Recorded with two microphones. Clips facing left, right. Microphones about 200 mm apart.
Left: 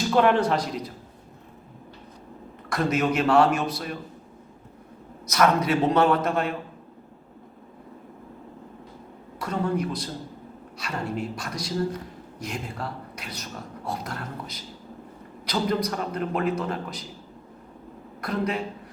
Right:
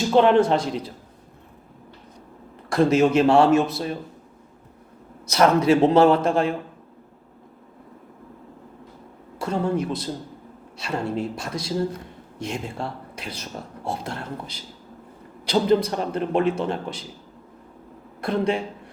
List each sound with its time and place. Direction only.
0.1 s a man's voice: 25° right (ahead or behind)
2.6 s a man's voice: 30° right (ahead or behind)
5.2 s a man's voice: 30° right (ahead or behind)
9.4 s a man's voice: 25° right (ahead or behind)
18.2 s a man's voice: 30° right (ahead or behind)